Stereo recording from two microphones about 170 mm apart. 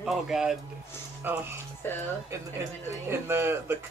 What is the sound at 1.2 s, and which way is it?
Speech, 10° right (ahead or behind).